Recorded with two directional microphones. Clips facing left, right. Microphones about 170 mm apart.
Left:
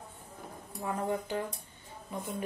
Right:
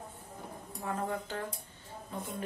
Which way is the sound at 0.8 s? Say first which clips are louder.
Left 3 dB; 15° left (ahead or behind).